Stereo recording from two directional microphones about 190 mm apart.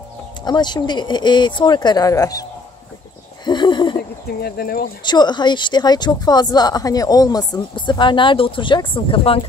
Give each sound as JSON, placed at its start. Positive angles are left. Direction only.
{"t": 0.5, "sound": "speech", "side_deg": 20}
{"t": 3.4, "sound": "a sound", "side_deg": 25}
{"t": 4.4, "sound": "speech", "side_deg": 55}
{"t": 5.0, "sound": "speech", "side_deg": 25}